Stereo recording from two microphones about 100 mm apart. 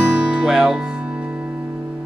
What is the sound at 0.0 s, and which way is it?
Music, 10° right (ahead or behind).